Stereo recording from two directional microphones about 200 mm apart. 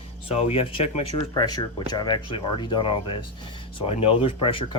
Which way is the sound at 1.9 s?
20° left (ahead or behind).